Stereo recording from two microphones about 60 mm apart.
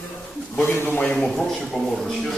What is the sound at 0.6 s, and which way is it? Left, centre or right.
Speech, left.